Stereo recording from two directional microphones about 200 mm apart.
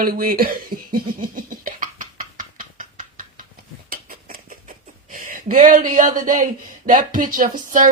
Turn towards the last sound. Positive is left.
turn(degrees=-40)  # may be behind; listen again after turning